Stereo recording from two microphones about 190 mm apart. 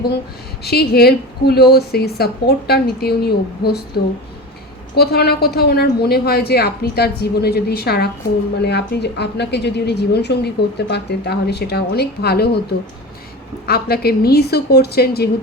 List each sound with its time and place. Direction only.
0.6 s a woman's voice: 55° left (ahead or behind)
13.7 s a woman's voice: 55° left (ahead or behind)